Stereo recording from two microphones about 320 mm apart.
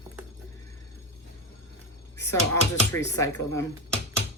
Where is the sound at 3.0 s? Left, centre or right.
Centre.